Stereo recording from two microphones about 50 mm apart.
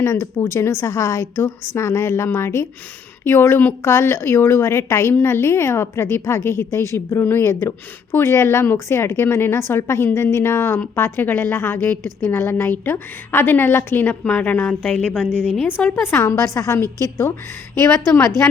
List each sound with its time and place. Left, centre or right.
0.0 s a woman's voice: left
11.3 s a woman's voice: left
14.3 s a woman's voice: left
16.0 s a woman's voice: left
16.2 s a woman's voice: left